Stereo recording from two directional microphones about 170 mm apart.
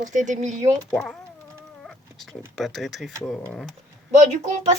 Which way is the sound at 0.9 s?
5° left (ahead or behind).